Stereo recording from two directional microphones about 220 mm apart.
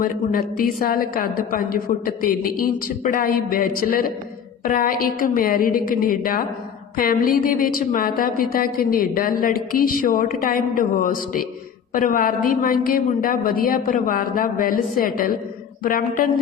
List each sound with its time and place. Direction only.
0.0 s a woman's voice: 40° left (ahead or behind)